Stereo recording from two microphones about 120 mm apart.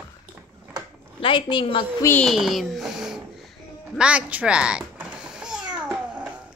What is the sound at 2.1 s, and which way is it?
Speech, centre (ahead or behind).